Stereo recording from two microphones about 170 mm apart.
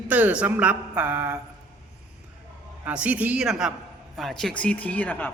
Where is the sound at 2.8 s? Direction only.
10° right (ahead or behind).